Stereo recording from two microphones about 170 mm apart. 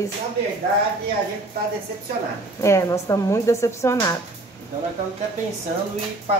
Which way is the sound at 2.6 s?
15° left (ahead or behind).